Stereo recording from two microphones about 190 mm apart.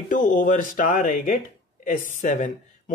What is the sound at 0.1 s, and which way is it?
Speech, 45° left (ahead or behind).